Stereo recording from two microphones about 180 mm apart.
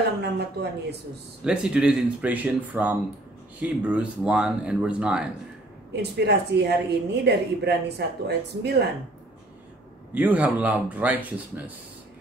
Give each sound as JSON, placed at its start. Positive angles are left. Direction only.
{"t": 0.2, "sound": "speech", "side_deg": -65}
{"t": 1.4, "sound": "speech", "side_deg": -5}
{"t": 6.1, "sound": "speech", "side_deg": -65}
{"t": 10.1, "sound": "speech", "side_deg": -10}